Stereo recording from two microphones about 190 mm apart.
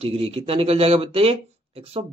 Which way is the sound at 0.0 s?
30° right (ahead or behind).